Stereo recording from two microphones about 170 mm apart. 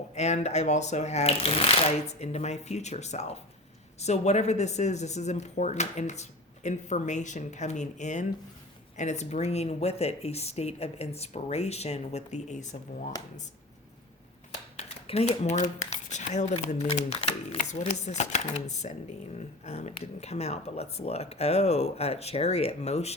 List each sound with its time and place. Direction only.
0.1 s speech: 40° left (ahead or behind)
14.8 s speech: 40° left (ahead or behind)